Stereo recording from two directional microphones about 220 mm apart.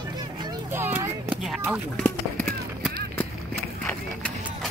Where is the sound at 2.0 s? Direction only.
5° left (ahead or behind).